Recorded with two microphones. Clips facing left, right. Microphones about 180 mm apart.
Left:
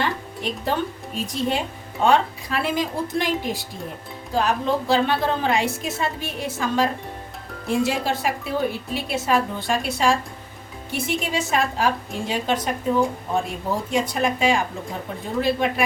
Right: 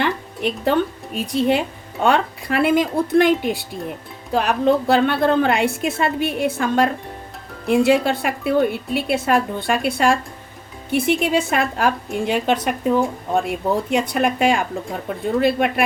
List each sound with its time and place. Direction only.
0.0 s music: 60° right (ahead or behind)
1.1 s a woman's voice: 60° right (ahead or behind)
13.9 s a woman's voice: 60° right (ahead or behind)